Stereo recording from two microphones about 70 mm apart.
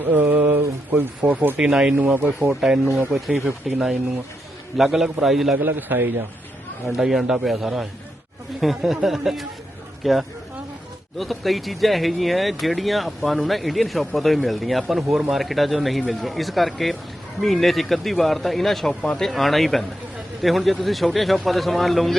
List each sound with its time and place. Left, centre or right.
0.1 s speech: right
1.5 s speech: centre
2.6 s speech: centre
3.7 s speech: centre
5.5 s a man's voice: right
6.8 s speech: centre